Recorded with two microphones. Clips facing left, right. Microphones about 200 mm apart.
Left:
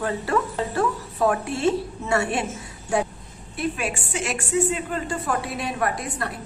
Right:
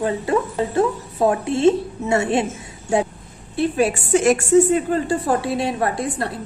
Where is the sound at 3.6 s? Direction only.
35° right (ahead or behind).